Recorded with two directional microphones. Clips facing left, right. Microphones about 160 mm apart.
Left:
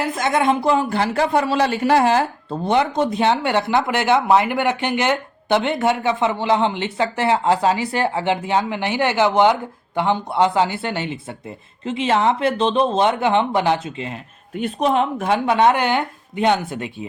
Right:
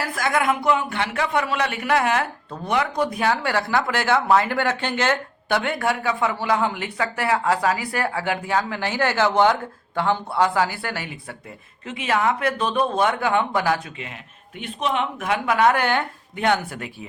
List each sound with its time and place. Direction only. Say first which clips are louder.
0.0 s speech: left 4 dB; 20° left (ahead or behind)